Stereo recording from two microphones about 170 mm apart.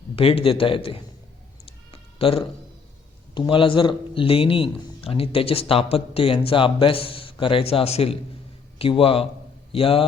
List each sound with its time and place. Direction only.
0.2 s speech: 35° left (ahead or behind)
1.9 s cat: 35° left (ahead or behind)
3.3 s speech: 30° left (ahead or behind)